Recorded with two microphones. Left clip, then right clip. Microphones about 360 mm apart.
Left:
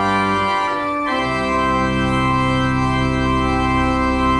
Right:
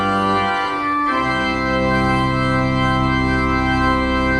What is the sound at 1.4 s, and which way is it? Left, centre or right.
Organ, centre.